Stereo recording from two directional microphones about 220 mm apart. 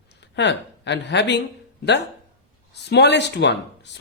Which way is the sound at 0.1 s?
55° left (ahead or behind).